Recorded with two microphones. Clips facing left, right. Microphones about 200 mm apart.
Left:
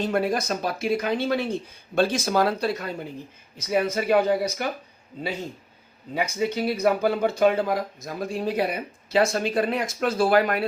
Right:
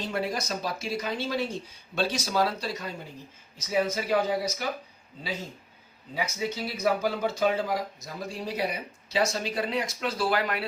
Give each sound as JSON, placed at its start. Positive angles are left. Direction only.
{"t": 0.0, "sound": "speech", "side_deg": 55}
{"t": 6.1, "sound": "speech", "side_deg": 60}